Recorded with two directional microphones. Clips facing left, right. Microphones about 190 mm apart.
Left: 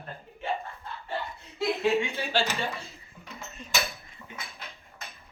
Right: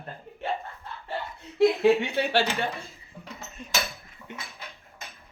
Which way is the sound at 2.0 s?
65° right (ahead or behind).